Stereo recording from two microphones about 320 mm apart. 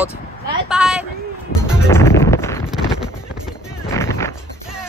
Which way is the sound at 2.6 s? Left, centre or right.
Centre.